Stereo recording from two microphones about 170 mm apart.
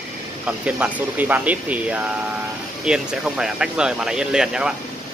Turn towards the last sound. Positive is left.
turn(degrees=-5)  # may be behind; listen again after turning